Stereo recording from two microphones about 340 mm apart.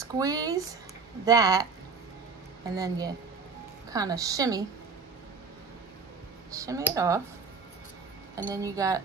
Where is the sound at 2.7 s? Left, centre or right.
Centre.